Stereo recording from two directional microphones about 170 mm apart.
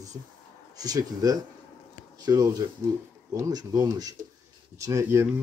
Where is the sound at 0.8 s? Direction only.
20° right (ahead or behind).